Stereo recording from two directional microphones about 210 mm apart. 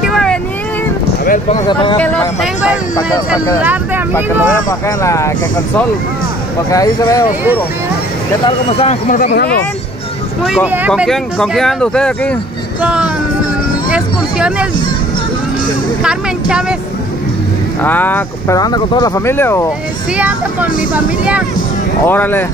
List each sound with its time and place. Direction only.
0.0 s vehicle: centre (ahead or behind)
1.7 s speech: 20° left (ahead or behind)
2.0 s speech: 5° left (ahead or behind)
4.6 s speech: 15° left (ahead or behind)
6.7 s speech: 15° left (ahead or behind)
8.5 s speech: 30° left (ahead or behind)
10.9 s speech: 5° left (ahead or behind)
12.8 s speech: 5° right (ahead or behind)
13.8 s hubbub: 5° right (ahead or behind)
16.0 s speech: 5° right (ahead or behind)
17.8 s speech: 10° left (ahead or behind)
20.2 s speech: 10° right (ahead or behind)
22.0 s speech: 10° left (ahead or behind)